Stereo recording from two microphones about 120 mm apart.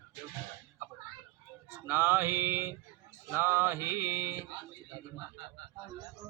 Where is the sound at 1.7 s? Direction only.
15° right (ahead or behind).